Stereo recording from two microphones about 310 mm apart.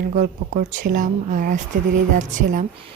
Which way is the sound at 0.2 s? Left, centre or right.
Right.